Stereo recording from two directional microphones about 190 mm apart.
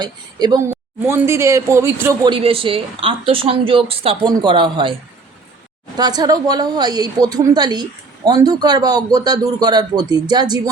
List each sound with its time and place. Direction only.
0.0 s a woman's voice: 20° right (ahead or behind)
2.2 s a woman's voice: 30° right (ahead or behind)
6.0 s a woman's voice: 20° right (ahead or behind)